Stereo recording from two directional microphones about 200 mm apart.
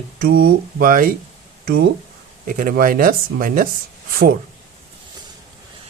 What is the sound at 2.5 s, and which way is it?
Speech, 45° right (ahead or behind).